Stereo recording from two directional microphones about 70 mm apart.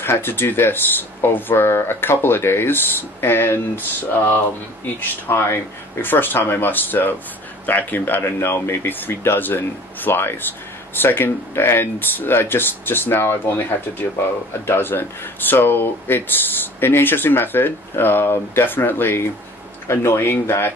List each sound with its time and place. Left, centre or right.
0.0 s speech: left
5.3 s speech: left
14.7 s speech: left